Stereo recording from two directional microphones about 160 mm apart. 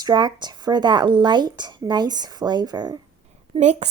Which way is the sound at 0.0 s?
25° right (ahead or behind).